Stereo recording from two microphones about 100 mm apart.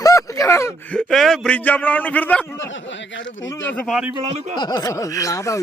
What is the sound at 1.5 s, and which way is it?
Speech, 15° left (ahead or behind).